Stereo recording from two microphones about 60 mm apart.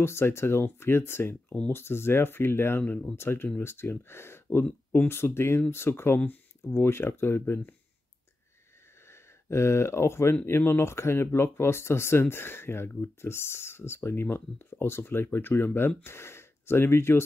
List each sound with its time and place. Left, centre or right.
0.0 s speech: left
2.8 s speech: centre
3.2 s speech: left
9.0 s speech: left